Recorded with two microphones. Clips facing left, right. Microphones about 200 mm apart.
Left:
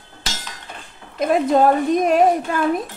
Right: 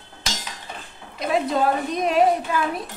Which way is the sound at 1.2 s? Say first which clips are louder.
Left 6 dB; 50° left (ahead or behind).